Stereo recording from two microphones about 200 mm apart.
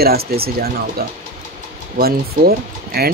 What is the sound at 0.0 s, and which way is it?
Speech, 50° right (ahead or behind).